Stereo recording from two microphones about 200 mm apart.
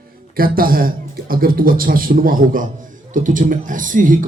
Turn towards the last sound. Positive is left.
turn(degrees=-40)  # may be behind; listen again after turning